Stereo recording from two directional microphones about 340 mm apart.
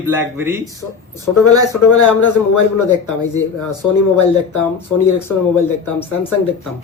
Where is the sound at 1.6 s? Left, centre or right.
Left.